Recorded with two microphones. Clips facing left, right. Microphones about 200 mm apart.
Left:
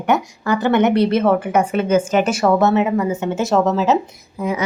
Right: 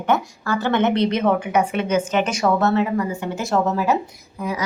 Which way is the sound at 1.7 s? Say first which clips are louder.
Left 4 dB; 45° left (ahead or behind).